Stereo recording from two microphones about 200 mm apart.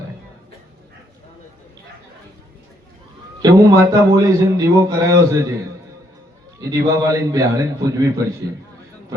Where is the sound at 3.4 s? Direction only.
15° right (ahead or behind).